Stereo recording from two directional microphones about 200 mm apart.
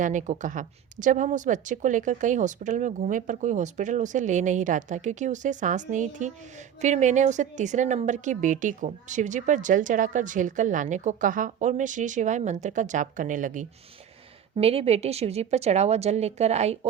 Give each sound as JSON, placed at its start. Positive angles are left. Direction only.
{"t": 0.0, "sound": "a woman's voice", "side_deg": -40}
{"t": 14.5, "sound": "a woman's voice", "side_deg": -30}